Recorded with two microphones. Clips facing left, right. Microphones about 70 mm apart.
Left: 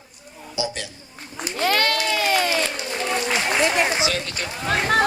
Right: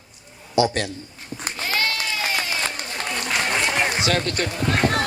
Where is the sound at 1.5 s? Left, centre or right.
Left.